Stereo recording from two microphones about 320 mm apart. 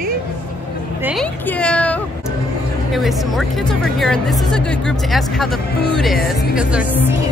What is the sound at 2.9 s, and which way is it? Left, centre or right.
Speech, centre.